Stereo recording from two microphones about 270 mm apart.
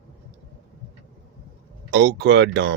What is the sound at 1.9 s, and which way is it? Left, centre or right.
Speech, right.